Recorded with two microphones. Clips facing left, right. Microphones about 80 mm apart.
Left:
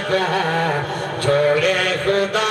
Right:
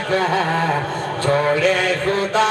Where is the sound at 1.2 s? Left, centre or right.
Right.